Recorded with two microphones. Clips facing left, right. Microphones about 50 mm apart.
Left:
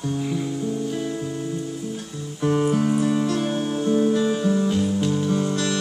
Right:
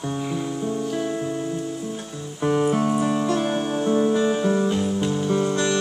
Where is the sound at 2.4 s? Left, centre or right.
Right.